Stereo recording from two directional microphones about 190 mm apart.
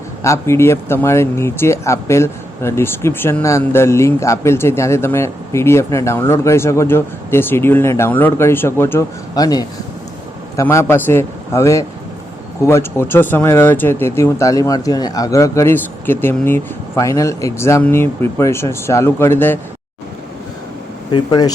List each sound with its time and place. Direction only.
0.2 s speech: 15° left (ahead or behind)
21.1 s speech: 20° left (ahead or behind)